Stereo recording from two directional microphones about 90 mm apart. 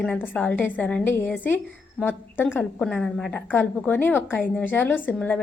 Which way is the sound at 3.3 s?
15° left (ahead or behind).